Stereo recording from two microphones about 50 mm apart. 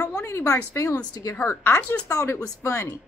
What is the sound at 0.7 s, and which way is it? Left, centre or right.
A woman's voice, left.